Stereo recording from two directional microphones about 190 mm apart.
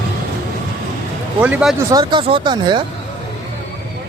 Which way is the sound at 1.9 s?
25° right (ahead or behind).